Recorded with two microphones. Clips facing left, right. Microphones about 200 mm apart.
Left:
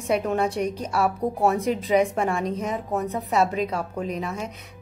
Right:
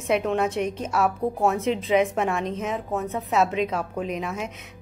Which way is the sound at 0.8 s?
Centre (ahead or behind).